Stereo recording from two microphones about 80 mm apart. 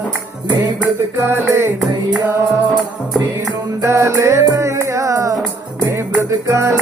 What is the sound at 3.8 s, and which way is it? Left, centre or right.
Music, right.